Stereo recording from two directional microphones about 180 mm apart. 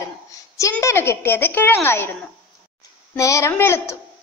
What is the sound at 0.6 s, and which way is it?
A woman's voice, 15° left (ahead or behind).